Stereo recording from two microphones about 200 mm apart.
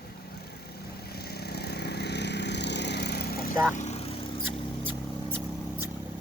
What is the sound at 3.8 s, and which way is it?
Vehicle, 35° left (ahead or behind).